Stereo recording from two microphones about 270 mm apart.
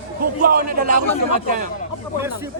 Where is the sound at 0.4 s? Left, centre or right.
Right.